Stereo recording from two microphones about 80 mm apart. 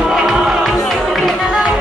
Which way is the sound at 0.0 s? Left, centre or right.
Centre.